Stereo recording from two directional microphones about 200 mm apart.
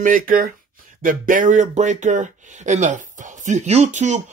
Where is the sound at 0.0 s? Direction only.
45° right (ahead or behind).